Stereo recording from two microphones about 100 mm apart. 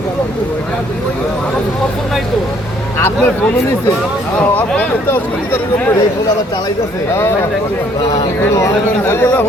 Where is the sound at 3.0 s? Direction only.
20° left (ahead or behind).